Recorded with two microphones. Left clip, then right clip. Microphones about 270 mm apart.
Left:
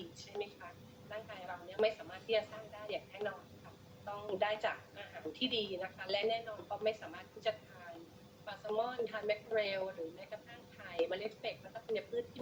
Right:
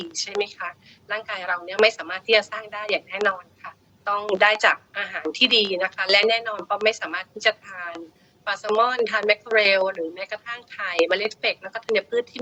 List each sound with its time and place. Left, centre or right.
0.2 s a woman's voice: right
8.8 s a woman's voice: right